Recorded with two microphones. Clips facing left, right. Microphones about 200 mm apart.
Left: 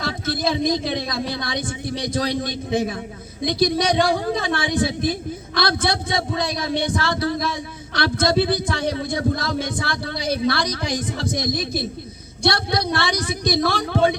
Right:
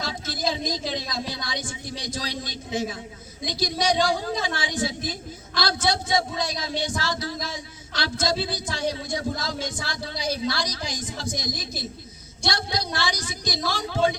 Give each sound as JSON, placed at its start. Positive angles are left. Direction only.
{"t": 0.0, "sound": "a man's voice", "side_deg": 60}